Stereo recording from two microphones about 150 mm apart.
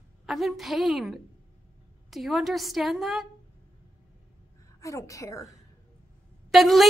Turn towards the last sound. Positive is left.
turn(degrees=0)  # may be behind; listen again after turning